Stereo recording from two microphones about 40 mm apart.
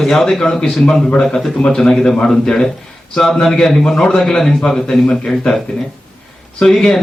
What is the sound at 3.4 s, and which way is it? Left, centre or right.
A man's voice, centre.